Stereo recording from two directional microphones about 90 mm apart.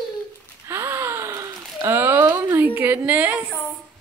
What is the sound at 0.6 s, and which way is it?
Gasp, 30° right (ahead or behind).